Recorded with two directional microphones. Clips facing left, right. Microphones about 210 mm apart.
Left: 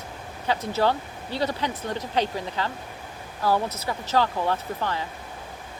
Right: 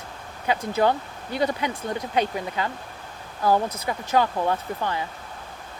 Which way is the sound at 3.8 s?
15° right (ahead or behind).